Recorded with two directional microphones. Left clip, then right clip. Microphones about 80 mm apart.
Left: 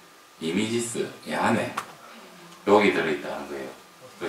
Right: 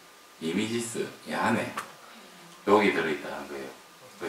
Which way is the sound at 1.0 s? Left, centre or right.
Centre.